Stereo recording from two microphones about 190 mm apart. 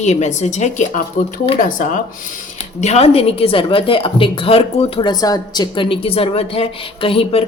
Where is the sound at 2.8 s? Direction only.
35° left (ahead or behind).